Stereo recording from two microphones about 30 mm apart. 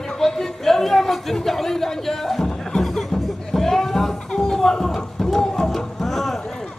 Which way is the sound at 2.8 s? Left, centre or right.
Centre.